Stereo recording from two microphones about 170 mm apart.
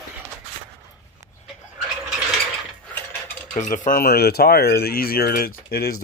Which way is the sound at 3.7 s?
50° left (ahead or behind).